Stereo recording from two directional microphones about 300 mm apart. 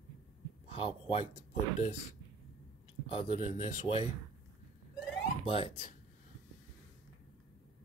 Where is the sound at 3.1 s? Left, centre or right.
Left.